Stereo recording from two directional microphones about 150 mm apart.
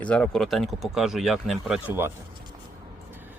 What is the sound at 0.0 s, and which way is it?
Speech, 10° left (ahead or behind).